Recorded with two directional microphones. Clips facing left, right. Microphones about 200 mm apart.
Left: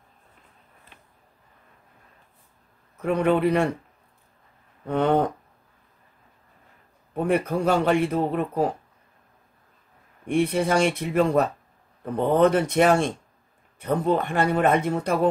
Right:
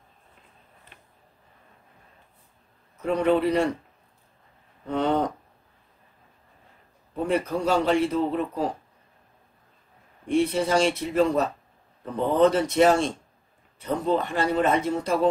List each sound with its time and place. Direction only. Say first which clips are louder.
3.0 s a man's voice: left 1 dB; 55° left (ahead or behind)
4.8 s a man's voice: left 3 dB; 55° left (ahead or behind)
7.2 s a man's voice: left 2 dB; 55° left (ahead or behind)
10.2 s a man's voice: left 1 dB; 55° left (ahead or behind)